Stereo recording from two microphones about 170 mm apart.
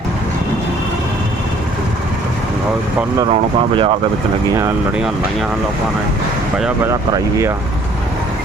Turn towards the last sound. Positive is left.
turn(degrees=-15)  # may be behind; listen again after turning